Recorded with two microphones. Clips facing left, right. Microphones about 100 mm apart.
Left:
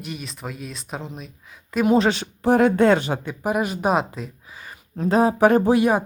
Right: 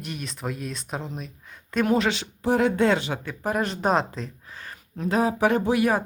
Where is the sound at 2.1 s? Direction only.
50° left (ahead or behind).